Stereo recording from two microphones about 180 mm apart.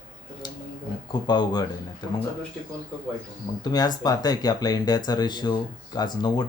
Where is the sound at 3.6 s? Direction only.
20° left (ahead or behind).